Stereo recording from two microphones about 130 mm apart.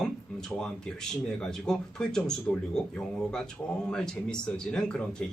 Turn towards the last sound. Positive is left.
turn(degrees=5)  # may be behind; listen again after turning